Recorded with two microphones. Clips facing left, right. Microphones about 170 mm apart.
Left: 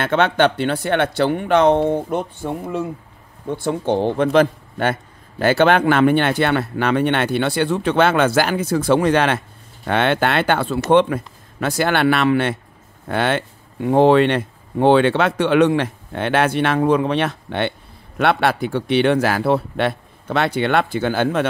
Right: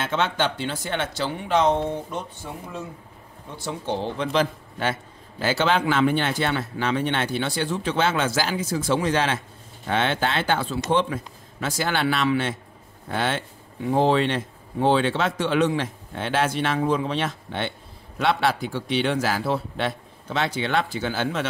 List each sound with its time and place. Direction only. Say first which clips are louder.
0.0 s speech: left 8 dB; 60° left (ahead or behind)